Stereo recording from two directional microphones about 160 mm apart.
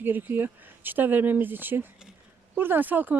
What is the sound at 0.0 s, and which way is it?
Speech, 10° right (ahead or behind).